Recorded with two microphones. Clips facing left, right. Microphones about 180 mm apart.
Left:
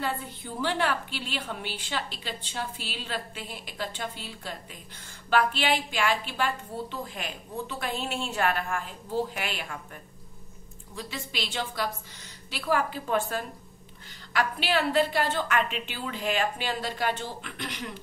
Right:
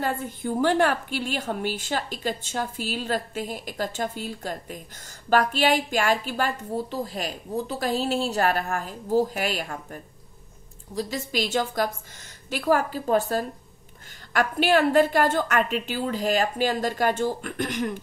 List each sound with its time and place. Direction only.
0.0 s a woman's voice: 50° right (ahead or behind)
11.0 s a woman's voice: 40° right (ahead or behind)